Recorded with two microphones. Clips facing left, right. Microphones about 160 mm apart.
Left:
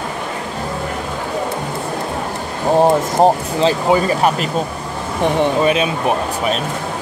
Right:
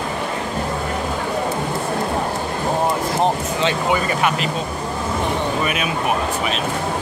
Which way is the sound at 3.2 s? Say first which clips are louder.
Left 6 dB; 35° left (ahead or behind).